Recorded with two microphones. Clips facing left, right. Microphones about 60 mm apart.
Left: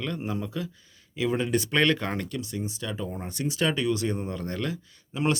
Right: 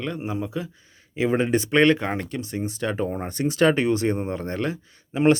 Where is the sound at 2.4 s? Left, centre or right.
Right.